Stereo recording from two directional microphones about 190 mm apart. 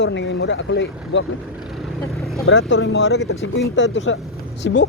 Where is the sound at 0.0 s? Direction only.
70° left (ahead or behind).